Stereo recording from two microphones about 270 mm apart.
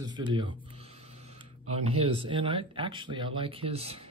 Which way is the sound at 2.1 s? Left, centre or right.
Centre.